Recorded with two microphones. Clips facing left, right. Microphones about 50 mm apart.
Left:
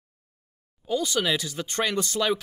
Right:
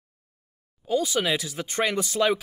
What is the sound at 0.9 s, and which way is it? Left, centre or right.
Speech, centre.